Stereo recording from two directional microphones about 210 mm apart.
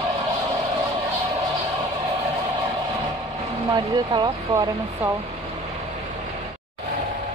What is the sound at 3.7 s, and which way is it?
Speech, 20° right (ahead or behind).